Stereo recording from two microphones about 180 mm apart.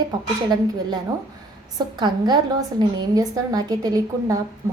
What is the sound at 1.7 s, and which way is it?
A woman's voice, 25° right (ahead or behind).